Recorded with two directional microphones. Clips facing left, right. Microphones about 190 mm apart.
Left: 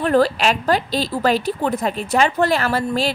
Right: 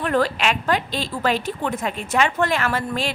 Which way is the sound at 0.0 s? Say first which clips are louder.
Left 4 dB; 35° left (ahead or behind).